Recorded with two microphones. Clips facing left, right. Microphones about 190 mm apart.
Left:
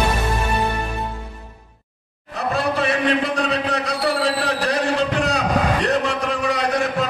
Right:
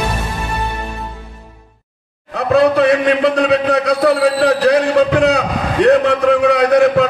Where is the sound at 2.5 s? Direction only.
65° right (ahead or behind).